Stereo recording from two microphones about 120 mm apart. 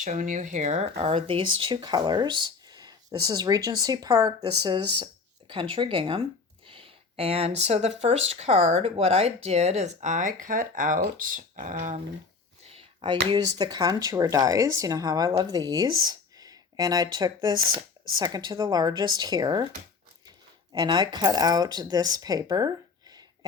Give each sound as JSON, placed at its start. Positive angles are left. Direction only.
{"t": 0.0, "sound": "speech", "side_deg": -90}
{"t": 0.9, "sound": "speech", "side_deg": -50}
{"t": 12.6, "sound": "speech", "side_deg": -50}
{"t": 20.7, "sound": "speech", "side_deg": -35}